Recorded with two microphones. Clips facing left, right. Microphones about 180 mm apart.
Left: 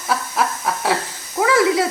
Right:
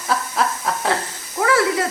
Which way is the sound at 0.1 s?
5° left (ahead or behind).